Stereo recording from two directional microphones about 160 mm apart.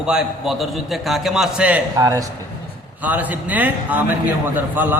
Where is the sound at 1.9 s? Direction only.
20° right (ahead or behind).